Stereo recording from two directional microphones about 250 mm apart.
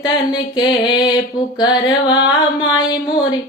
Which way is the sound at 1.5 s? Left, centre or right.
Centre.